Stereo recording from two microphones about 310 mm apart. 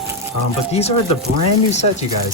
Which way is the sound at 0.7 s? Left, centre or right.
Centre.